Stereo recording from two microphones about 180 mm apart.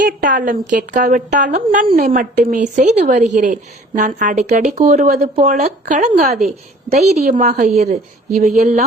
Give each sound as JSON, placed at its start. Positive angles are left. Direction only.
{"t": 0.2, "sound": "a woman's voice", "side_deg": -50}
{"t": 5.5, "sound": "a woman's voice", "side_deg": -40}